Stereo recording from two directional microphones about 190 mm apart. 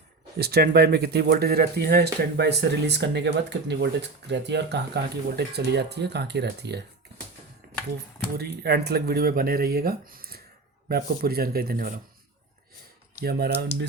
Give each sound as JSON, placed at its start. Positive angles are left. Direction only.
{"t": 0.3, "sound": "speech", "side_deg": -55}
{"t": 8.4, "sound": "speech", "side_deg": -60}
{"t": 13.1, "sound": "speech", "side_deg": -55}